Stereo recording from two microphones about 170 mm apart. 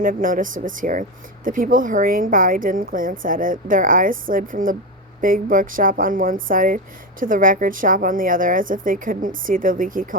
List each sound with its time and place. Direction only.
0.0 s speech: 55° right (ahead or behind)